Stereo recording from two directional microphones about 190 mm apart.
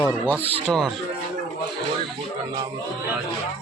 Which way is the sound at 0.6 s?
Centre (ahead or behind).